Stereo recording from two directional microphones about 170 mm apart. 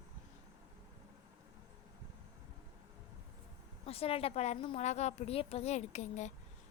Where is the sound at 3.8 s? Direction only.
35° left (ahead or behind).